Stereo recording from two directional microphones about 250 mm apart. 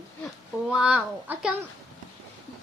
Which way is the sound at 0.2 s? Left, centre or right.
Centre.